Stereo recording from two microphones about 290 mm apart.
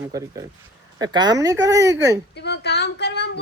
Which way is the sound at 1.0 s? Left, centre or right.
Centre.